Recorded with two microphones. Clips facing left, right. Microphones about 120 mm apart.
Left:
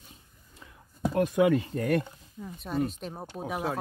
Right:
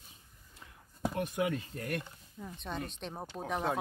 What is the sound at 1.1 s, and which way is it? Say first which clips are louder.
Speech: left 11 dB; 90° left.